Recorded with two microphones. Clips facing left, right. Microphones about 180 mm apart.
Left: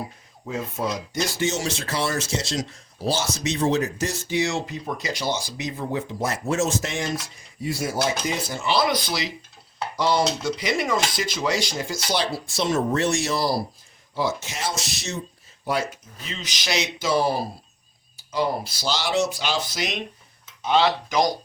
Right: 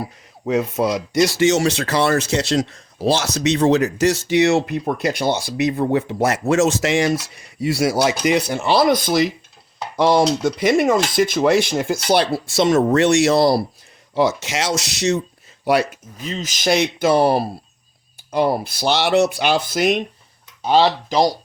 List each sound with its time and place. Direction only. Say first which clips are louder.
0.4 s speech: right 9 dB; 80° right
16.2 s speech: right 10 dB; 40° right (ahead or behind)
20.7 s speech: right 5 dB; 35° right (ahead or behind)